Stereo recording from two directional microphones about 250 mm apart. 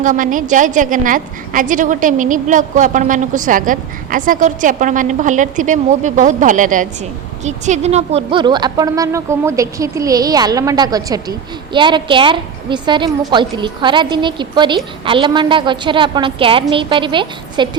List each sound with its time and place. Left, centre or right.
0.0 s a woman's voice: right